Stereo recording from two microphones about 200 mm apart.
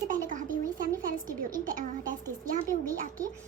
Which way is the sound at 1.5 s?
40° right (ahead or behind).